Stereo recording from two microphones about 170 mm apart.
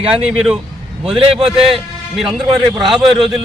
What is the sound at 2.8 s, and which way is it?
Speech, centre (ahead or behind).